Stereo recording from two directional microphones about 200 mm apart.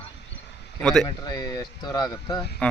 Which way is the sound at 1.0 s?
20° left (ahead or behind).